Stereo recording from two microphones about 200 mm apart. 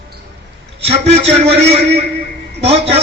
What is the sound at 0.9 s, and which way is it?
A man's voice, 30° right (ahead or behind).